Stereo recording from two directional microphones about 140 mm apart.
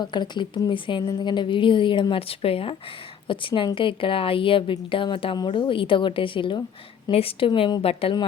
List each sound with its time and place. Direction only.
0.0 s a woman's voice: 30° left (ahead or behind)